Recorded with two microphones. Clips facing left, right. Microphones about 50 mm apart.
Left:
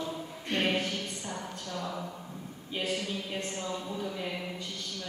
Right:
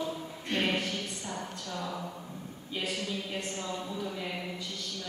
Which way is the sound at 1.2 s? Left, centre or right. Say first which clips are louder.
Even; centre.